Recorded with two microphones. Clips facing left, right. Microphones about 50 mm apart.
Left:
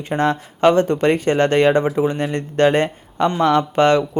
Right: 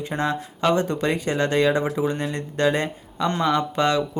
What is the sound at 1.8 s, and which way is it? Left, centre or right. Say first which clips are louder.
Speech: left 5 dB; left.